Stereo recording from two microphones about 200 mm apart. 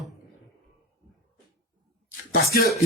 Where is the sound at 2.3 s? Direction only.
50° left (ahead or behind).